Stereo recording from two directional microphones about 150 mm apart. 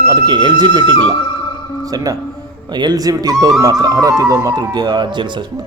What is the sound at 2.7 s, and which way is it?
Speech, 25° right (ahead or behind).